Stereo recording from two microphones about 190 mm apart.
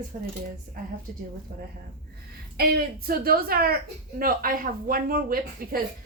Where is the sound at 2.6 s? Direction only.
50° right (ahead or behind).